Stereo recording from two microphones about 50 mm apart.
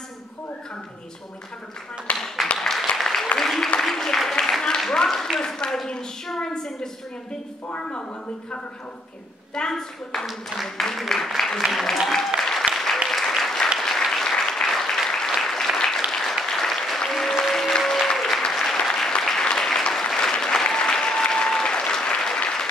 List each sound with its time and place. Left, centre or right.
2.1 s speech: left
2.5 s applause: centre
3.8 s a sound: centre
9.6 s a woman's voice: centre
12.4 s applause: centre